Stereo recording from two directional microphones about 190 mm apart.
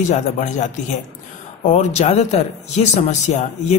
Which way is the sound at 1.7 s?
35° left (ahead or behind).